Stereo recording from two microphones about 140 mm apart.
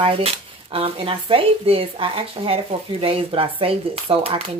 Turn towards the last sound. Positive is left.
turn(degrees=-40)  # may be behind; listen again after turning